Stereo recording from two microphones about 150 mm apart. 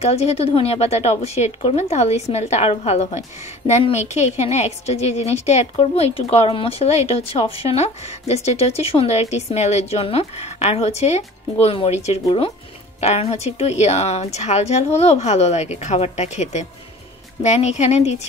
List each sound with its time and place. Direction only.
0.0 s speech: 45° left (ahead or behind)